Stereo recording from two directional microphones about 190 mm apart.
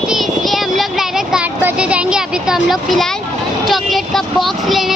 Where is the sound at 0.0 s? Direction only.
Centre (ahead or behind).